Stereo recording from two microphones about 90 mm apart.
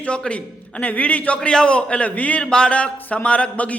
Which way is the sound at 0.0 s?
10° left (ahead or behind).